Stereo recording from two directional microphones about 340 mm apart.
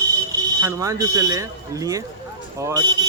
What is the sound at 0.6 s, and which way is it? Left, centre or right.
Speech, centre.